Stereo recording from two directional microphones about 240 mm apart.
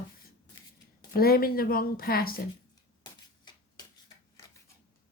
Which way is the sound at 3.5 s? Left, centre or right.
Centre.